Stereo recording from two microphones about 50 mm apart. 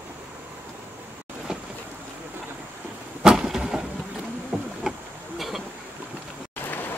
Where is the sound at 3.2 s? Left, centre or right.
Centre.